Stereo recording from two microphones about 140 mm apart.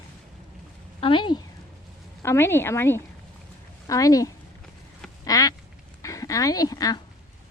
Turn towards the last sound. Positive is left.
turn(degrees=25)  # may be behind; listen again after turning